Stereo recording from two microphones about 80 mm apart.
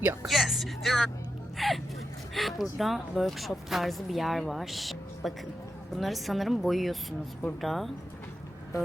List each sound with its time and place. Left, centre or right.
0.0 s speech: right
0.3 s speech: centre